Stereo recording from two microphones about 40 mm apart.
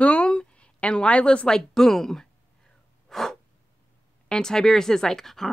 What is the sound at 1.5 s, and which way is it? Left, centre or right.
Speech, centre.